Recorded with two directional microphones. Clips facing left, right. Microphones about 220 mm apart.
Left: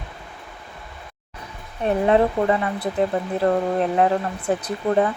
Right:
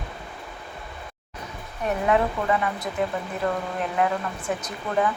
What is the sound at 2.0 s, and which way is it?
Speech, 35° left (ahead or behind).